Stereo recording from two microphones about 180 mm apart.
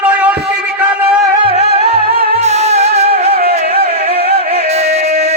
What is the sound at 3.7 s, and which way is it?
Music, 35° left (ahead or behind).